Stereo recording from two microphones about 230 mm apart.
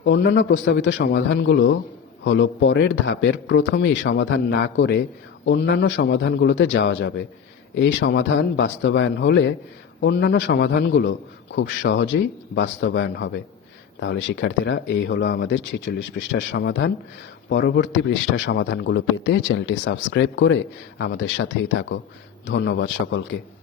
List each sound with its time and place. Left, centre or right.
0.0 s a man's voice: left